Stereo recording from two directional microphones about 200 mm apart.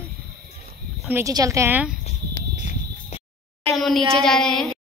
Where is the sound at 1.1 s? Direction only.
15° right (ahead or behind).